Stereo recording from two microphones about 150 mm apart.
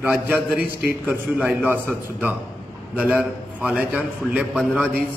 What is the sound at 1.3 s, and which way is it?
Speech, 10° right (ahead or behind).